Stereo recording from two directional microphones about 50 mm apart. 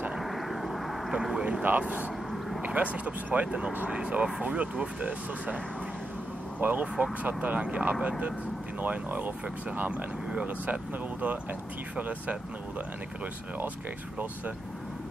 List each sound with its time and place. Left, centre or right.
0.2 s vehicle: centre
1.4 s speech: right
3.9 s speech: right
6.6 s speech: right